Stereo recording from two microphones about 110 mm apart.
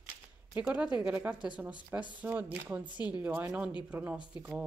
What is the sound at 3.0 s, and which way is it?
Speech, 40° left (ahead or behind).